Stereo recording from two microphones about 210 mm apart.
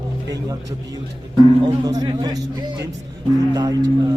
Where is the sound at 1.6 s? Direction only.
20° right (ahead or behind).